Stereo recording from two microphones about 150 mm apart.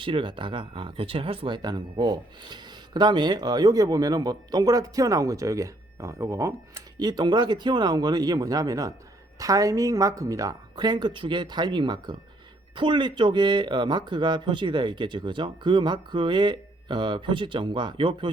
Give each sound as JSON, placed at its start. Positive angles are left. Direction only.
{"t": 0.0, "sound": "speech", "side_deg": -35}